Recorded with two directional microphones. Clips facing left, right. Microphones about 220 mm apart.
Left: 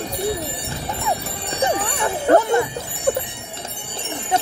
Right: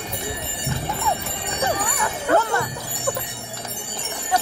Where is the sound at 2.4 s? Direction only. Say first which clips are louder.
Left 5 dB; 20° left (ahead or behind).